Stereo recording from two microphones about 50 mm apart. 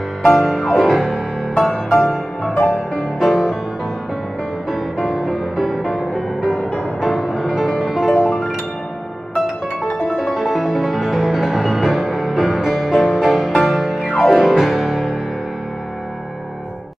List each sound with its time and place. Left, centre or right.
0.2 s music: centre
4.6 s music: centre
9.9 s music: centre